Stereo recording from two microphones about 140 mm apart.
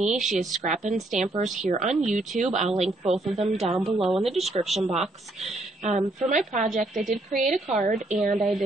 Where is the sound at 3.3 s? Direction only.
50° right (ahead or behind).